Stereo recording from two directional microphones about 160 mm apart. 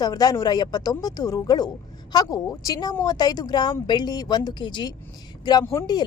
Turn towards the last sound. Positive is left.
turn(degrees=20)  # may be behind; listen again after turning